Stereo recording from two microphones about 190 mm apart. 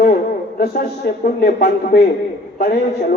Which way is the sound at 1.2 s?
50° left (ahead or behind).